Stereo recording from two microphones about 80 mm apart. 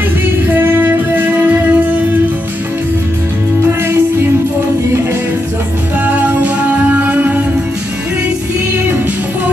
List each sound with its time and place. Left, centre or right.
0.5 s music: right
6.0 s music: centre